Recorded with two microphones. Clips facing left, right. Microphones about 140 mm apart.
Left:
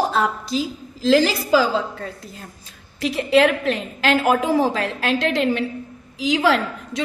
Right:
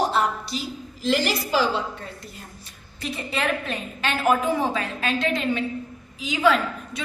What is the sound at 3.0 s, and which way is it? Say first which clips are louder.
A woman's voice: left 12 dB; 90° left.